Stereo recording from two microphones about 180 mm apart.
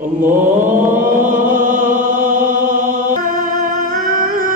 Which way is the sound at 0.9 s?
45° right (ahead or behind).